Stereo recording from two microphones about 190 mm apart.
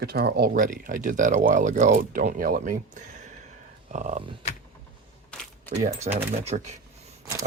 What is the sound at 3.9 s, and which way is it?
Speech, 40° right (ahead or behind).